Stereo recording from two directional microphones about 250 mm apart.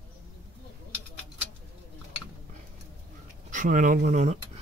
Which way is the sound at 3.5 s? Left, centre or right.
Right.